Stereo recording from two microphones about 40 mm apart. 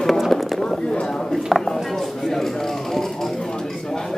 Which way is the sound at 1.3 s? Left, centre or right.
Centre.